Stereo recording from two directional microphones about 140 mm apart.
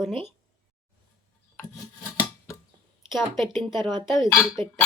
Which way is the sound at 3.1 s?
Centre (ahead or behind).